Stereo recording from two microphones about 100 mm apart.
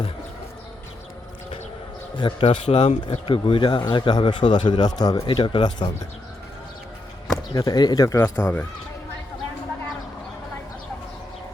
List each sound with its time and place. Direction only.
2.1 s speech: 55° left (ahead or behind)
5.2 s speech: 55° left (ahead or behind)
7.5 s speech: 35° left (ahead or behind)
8.2 s speech: 15° left (ahead or behind)